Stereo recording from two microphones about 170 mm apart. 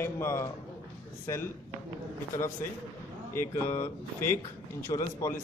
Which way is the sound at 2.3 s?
15° left (ahead or behind).